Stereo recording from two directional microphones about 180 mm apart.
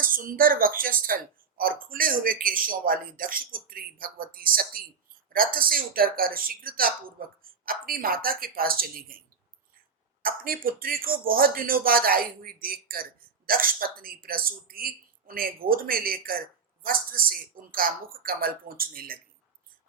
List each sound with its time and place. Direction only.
0.0 s speech: 50° right (ahead or behind)
10.2 s speech: 55° right (ahead or behind)